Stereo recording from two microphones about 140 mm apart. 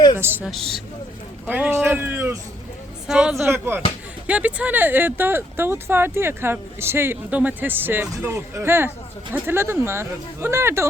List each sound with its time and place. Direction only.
0.2 s speech: 15° right (ahead or behind)
0.4 s a woman's voice: centre (ahead or behind)
1.5 s speech: 10° right (ahead or behind)
3.1 s a woman's voice: 5° right (ahead or behind)
3.4 s speech: 15° right (ahead or behind)